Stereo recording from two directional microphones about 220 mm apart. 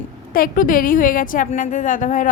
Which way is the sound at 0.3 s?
40° left (ahead or behind).